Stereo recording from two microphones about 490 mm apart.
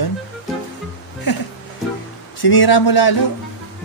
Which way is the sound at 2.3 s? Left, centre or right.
Left.